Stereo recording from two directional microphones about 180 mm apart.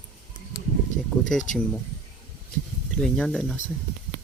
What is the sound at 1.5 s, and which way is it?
Speech, 45° left (ahead or behind).